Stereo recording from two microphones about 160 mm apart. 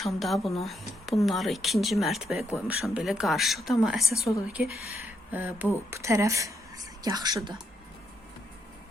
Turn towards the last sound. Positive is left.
turn(degrees=-25)  # may be behind; listen again after turning